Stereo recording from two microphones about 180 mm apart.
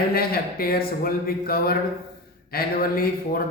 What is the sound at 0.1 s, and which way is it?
A man's voice, 55° left (ahead or behind).